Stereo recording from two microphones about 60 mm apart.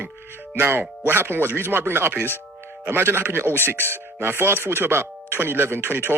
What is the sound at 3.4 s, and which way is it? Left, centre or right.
Speech, left.